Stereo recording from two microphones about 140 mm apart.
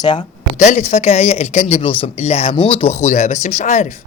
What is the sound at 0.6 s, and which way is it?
Speech, 50° left (ahead or behind).